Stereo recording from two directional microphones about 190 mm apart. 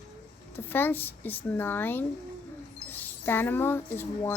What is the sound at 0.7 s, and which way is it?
A woman's voice, 10° left (ahead or behind).